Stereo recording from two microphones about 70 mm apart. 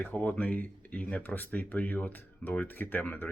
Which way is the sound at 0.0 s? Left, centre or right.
Left.